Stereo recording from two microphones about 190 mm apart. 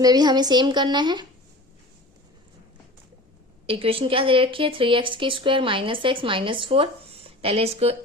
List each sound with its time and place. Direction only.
0.0 s speech: 20° right (ahead or behind)
3.7 s speech: 30° right (ahead or behind)